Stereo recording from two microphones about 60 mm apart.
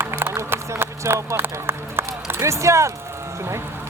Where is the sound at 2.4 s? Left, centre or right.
Right.